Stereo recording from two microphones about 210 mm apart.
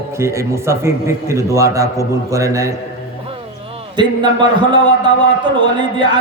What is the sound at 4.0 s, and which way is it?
A man's voice, 20° right (ahead or behind).